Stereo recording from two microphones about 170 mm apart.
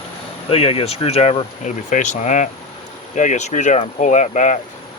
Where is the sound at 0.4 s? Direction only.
35° left (ahead or behind).